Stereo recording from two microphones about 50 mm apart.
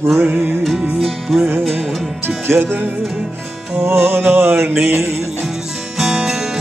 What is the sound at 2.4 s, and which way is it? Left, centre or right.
Music, right.